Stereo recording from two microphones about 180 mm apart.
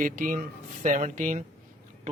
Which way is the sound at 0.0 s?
45° right (ahead or behind).